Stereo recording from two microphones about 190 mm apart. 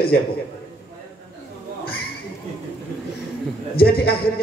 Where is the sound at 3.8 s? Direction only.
55° left (ahead or behind).